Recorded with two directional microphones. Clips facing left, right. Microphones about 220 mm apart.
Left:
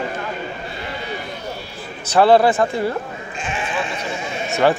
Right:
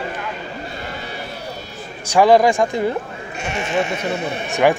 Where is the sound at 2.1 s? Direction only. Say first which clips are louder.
Even; 15° right (ahead or behind).